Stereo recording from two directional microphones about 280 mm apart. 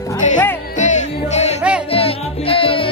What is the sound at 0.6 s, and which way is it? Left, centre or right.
Music, left.